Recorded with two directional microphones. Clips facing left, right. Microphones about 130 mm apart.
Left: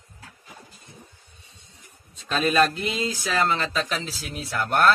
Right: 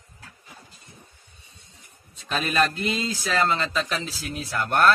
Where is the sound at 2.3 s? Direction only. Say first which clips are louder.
Left 3 dB; centre (ahead or behind).